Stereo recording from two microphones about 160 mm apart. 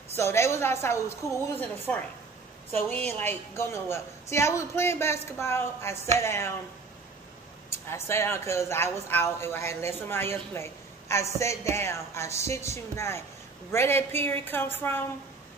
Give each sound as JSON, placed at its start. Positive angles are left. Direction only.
{"t": 0.1, "sound": "a woman's voice", "side_deg": 15}
{"t": 2.7, "sound": "a woman's voice", "side_deg": 10}
{"t": 7.9, "sound": "a woman's voice", "side_deg": 15}